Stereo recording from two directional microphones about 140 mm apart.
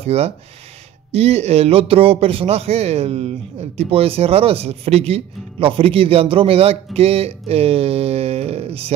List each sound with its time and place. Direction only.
0.0 s a man's voice: 45° right (ahead or behind)